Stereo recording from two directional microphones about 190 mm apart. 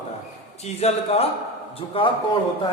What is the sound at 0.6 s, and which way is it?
A man's voice, 35° left (ahead or behind).